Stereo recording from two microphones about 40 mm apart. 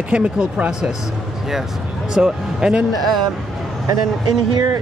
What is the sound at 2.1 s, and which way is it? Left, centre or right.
Speech, centre.